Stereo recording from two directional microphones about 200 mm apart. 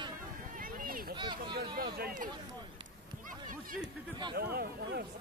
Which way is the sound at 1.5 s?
50° right (ahead or behind).